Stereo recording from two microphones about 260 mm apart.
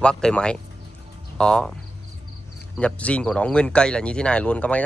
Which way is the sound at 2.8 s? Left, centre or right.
Centre.